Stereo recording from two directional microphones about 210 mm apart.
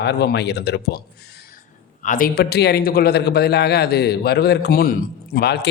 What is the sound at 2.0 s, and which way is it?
A man's voice, 40° left (ahead or behind).